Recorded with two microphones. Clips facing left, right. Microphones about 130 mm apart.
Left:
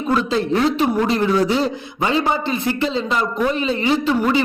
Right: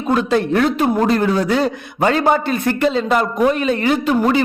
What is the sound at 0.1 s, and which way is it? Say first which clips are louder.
A man's voice: right 3 dB; 55° right (ahead or behind).